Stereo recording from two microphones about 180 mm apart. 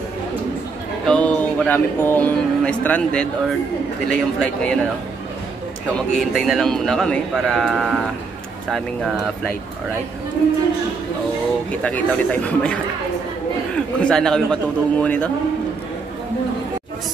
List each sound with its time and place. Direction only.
1.0 s speech: 5° left (ahead or behind)
6.1 s speech: centre (ahead or behind)
11.8 s speech: 10° left (ahead or behind)
13.7 s speech: 5° left (ahead or behind)